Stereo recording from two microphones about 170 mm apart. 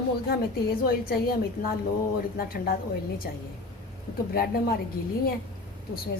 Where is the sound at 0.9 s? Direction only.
60° left (ahead or behind).